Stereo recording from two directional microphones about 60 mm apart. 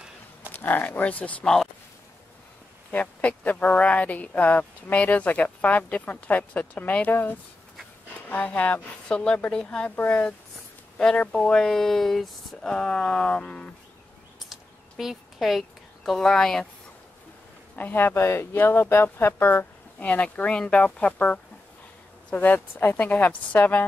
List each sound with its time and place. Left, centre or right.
0.5 s speech: left
1.4 s speech: centre
2.9 s speech: left
11.0 s speech: centre
12.7 s speech: centre
14.5 s a sound: centre
16.1 s speech: centre
17.7 s speech: left
18.1 s speech: left
20.0 s speech: left